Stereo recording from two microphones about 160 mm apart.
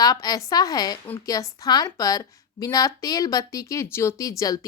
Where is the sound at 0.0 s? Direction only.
25° left (ahead or behind).